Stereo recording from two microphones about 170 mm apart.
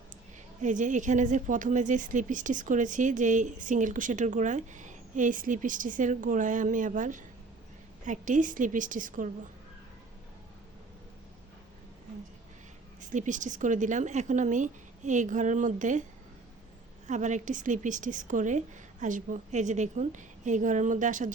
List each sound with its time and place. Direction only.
0.6 s speech: 45° right (ahead or behind)
13.0 s speech: 50° right (ahead or behind)
17.1 s speech: 45° right (ahead or behind)